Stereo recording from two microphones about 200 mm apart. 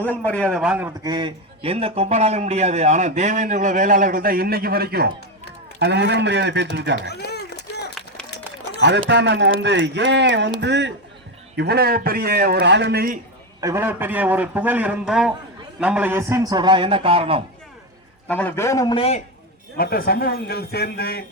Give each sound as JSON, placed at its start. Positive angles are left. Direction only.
{"t": 0.0, "sound": "a man's voice", "side_deg": 5}
{"t": 1.1, "sound": "a man's voice", "side_deg": -25}
{"t": 7.1, "sound": "a sound", "side_deg": 55}
{"t": 8.8, "sound": "a man's voice", "side_deg": -60}
{"t": 13.6, "sound": "a man's voice", "side_deg": -15}
{"t": 18.3, "sound": "a man's voice", "side_deg": 10}
{"t": 19.7, "sound": "a man's voice", "side_deg": 50}